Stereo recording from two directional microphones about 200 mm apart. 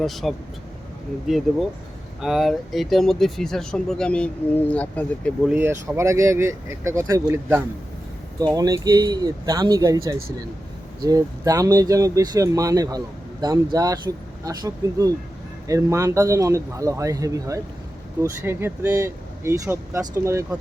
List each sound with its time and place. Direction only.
0.0 s speech: centre (ahead or behind)
2.2 s speech: centre (ahead or behind)
5.5 s speech: 10° right (ahead or behind)